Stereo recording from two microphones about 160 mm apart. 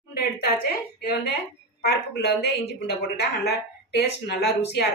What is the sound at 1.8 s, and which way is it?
A woman's voice, 85° left.